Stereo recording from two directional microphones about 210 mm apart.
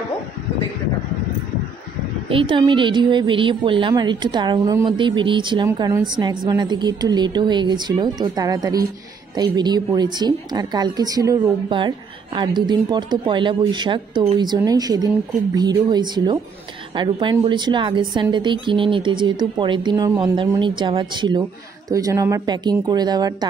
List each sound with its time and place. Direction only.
2.2 s a woman's voice: 25° right (ahead or behind)